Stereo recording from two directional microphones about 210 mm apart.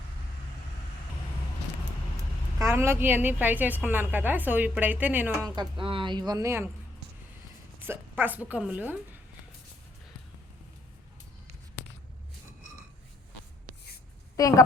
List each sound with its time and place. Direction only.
2.6 s a woman's voice: 10° right (ahead or behind)
7.9 s a woman's voice: 10° right (ahead or behind)
11.8 s a sound: 55° left (ahead or behind)
14.3 s a woman's voice: 15° left (ahead or behind)